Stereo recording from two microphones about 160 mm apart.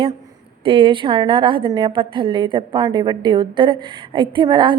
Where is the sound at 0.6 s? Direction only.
35° right (ahead or behind).